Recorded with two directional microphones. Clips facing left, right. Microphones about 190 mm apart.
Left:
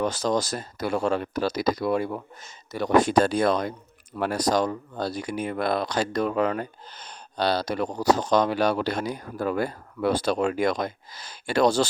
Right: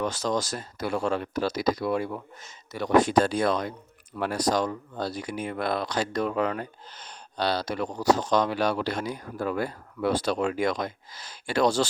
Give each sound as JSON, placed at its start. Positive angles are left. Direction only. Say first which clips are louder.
{"t": 0.0, "sound": "speech", "louder": "left 3 dB", "side_deg": 35}